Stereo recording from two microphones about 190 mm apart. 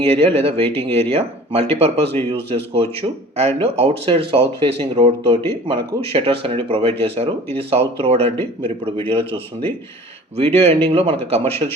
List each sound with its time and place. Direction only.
0.0 s speech: 30° right (ahead or behind)
3.3 s speech: 30° right (ahead or behind)
10.4 s speech: 35° right (ahead or behind)